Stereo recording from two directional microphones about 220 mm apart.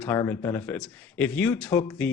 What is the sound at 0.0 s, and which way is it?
Speech, 10° left (ahead or behind).